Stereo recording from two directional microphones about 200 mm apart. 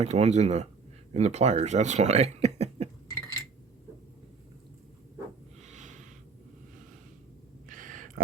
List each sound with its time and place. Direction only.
0.0 s speech: 35° right (ahead or behind)
5.6 s snort: 40° right (ahead or behind)
7.7 s a sound: 40° right (ahead or behind)